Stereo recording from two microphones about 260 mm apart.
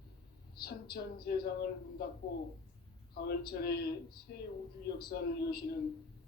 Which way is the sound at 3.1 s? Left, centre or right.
Left.